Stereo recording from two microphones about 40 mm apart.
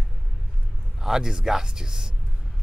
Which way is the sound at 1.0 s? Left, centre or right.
Centre.